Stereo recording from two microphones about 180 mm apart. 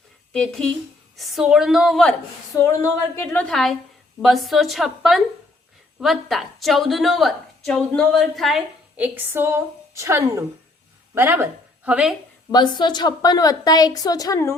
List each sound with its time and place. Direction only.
0.3 s a woman's voice: 5° left (ahead or behind)
2.6 s a woman's voice: 15° left (ahead or behind); by 12.1 s 5° right (ahead or behind)
12.5 s a woman's voice: 25° left (ahead or behind)